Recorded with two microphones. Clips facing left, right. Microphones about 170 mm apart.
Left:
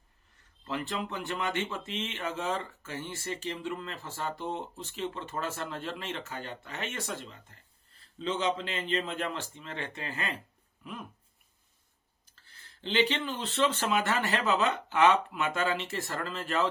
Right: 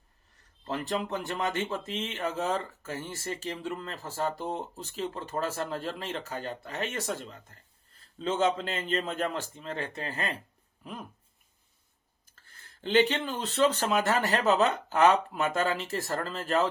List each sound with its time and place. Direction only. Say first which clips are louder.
0.3 s speech: right 1 dB; 40° right (ahead or behind)
12.5 s speech: right 5 dB; 50° right (ahead or behind)